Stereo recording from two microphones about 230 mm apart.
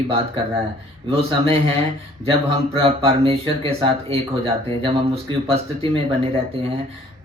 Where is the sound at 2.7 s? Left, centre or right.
Right.